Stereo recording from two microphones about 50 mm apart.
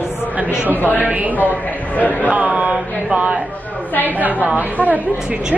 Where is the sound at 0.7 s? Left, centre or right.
Left.